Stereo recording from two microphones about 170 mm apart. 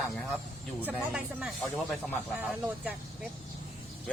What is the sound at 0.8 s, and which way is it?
Speech, 5° right (ahead or behind).